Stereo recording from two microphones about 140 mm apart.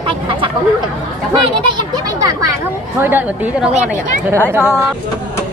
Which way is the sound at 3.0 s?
15° right (ahead or behind).